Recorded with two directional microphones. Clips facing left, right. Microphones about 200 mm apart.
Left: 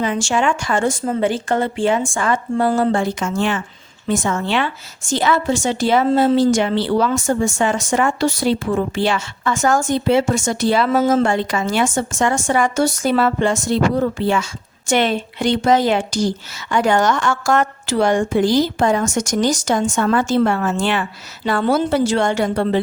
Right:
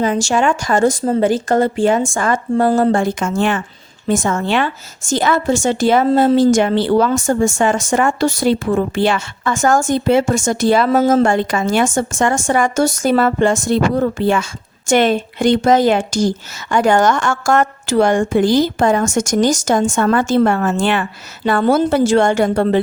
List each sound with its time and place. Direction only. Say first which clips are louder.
0.0 s a woman's voice: right 3 dB; 40° right (ahead or behind)